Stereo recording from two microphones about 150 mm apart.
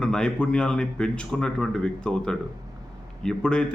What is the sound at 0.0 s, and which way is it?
Speech, 5° left (ahead or behind).